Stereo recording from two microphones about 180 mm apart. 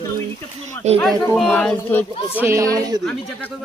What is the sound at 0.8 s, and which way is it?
Speech, 40° right (ahead or behind).